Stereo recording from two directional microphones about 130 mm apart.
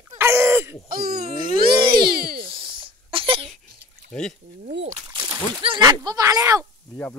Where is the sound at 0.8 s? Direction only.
90° right.